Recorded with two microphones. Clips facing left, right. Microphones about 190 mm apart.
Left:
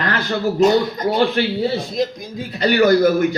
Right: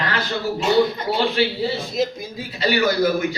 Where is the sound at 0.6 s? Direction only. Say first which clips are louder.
Left 8 dB; 40° left (ahead or behind).